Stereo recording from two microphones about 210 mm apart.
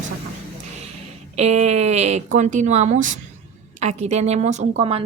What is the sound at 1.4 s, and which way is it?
Speech, 30° right (ahead or behind).